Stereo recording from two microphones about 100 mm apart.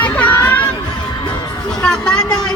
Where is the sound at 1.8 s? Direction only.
10° left (ahead or behind).